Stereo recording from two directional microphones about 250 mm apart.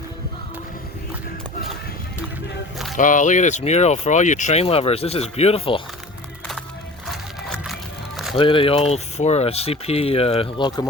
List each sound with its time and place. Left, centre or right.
2.9 s speech: left
7.1 s music: centre
8.4 s speech: left